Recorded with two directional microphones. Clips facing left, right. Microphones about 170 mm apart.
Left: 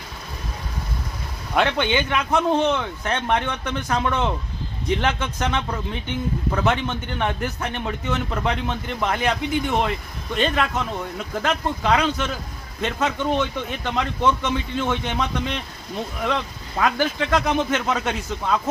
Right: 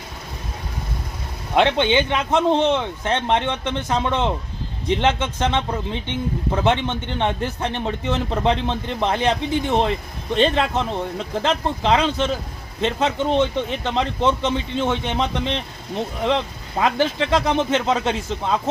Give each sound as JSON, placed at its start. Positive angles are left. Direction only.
{"t": 1.5, "sound": "a man's voice", "side_deg": -25}